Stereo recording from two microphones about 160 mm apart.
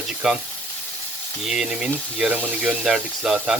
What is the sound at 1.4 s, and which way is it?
Speech, 5° right (ahead or behind).